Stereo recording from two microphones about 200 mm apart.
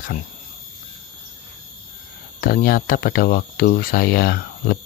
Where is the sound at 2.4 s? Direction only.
50° left (ahead or behind).